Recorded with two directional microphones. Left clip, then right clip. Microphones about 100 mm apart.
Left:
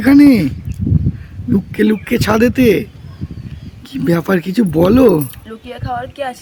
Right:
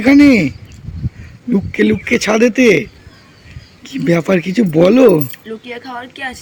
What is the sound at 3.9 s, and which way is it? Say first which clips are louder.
Speech: right 2 dB; 25° left (ahead or behind).